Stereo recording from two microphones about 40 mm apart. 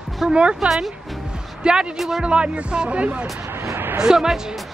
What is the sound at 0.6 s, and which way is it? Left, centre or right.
Speech, centre.